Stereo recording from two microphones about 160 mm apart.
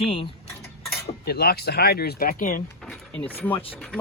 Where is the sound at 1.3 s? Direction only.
80° left; by 2.6 s 60° left (ahead or behind).